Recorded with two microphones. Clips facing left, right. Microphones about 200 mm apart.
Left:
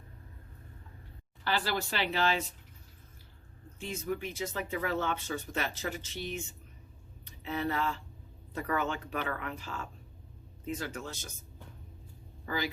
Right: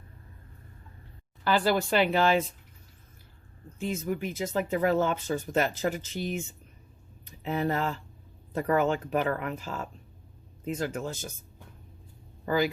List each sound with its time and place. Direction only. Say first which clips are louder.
1.5 s speech: right 8 dB; 50° right (ahead or behind)
4.1 s speech: right 3 dB; 45° right (ahead or behind)
12.5 s speech: right 9 dB; 50° right (ahead or behind)